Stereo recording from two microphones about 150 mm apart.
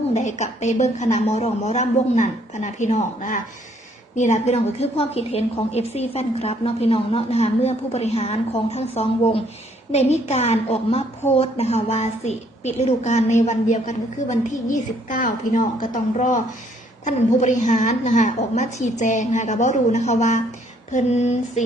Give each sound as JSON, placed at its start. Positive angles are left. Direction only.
{"t": 0.1, "sound": "a woman's voice", "side_deg": 50}